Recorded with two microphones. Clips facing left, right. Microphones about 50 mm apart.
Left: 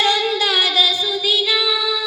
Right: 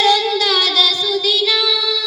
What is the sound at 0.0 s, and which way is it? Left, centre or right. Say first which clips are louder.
Child singing: right 3 dB; left.